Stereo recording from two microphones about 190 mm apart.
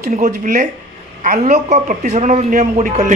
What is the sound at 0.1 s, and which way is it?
A man's voice, 45° right (ahead or behind).